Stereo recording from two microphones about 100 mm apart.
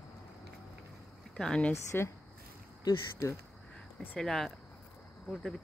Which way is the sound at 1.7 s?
25° left (ahead or behind).